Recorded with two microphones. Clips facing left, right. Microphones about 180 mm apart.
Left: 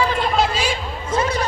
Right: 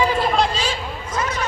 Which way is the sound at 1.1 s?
30° left (ahead or behind).